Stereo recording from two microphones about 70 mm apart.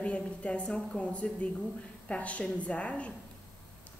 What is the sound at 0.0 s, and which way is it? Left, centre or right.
A woman's voice, centre.